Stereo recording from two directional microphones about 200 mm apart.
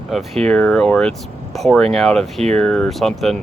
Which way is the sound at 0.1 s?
Centre (ahead or behind).